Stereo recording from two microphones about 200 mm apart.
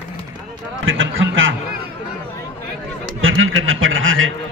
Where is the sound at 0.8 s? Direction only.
75° right (ahead or behind).